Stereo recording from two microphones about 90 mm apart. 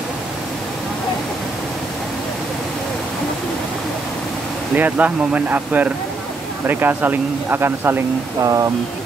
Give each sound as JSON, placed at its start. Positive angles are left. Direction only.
{"t": 4.7, "sound": "speech", "side_deg": -20}
{"t": 8.4, "sound": "speech", "side_deg": -40}